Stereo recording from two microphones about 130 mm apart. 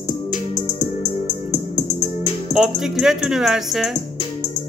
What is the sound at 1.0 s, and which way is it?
Music, 55° left (ahead or behind).